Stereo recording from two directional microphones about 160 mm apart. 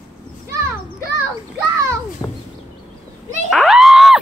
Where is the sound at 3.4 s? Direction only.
Centre (ahead or behind).